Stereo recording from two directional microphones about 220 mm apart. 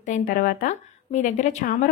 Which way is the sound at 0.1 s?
40° left (ahead or behind).